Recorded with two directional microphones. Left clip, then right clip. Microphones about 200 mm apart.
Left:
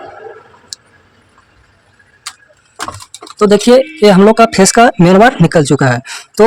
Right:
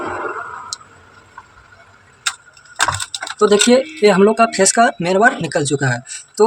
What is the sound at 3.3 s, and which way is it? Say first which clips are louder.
Speech: left 5 dB; 55° left (ahead or behind).